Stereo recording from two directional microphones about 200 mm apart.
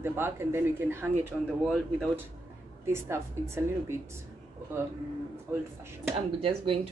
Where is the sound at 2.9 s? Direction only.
15° right (ahead or behind).